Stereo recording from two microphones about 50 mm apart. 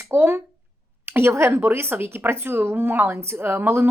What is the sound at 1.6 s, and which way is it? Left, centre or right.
Speech, right.